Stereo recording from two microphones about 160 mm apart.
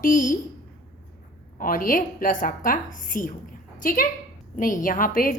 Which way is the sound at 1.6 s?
60° left (ahead or behind).